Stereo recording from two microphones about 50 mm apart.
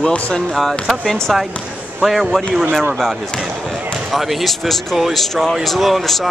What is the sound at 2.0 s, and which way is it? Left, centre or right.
Speech, centre.